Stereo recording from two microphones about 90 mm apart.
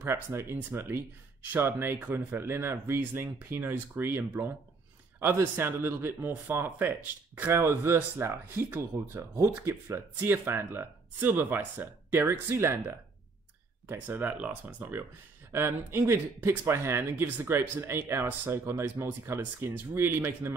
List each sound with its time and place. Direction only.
0.0 s speech: 30° right (ahead or behind)